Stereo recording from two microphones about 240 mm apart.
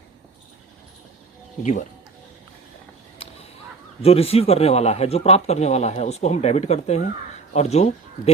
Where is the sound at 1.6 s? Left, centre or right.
Left.